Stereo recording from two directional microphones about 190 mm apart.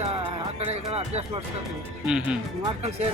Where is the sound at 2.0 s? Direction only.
5° right (ahead or behind).